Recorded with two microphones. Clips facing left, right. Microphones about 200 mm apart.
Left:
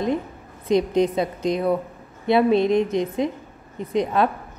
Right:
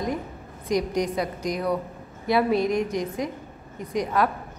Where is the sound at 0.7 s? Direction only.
25° left (ahead or behind).